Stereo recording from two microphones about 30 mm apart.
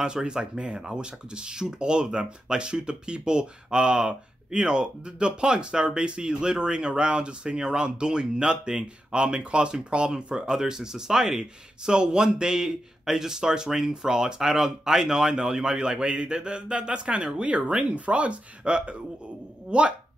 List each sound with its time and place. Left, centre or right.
0.0 s speech: right
10.5 s speech: centre; by 19.9 s right